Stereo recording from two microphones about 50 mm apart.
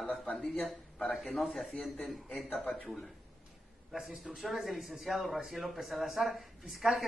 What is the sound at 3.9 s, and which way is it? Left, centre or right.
A man's voice, centre.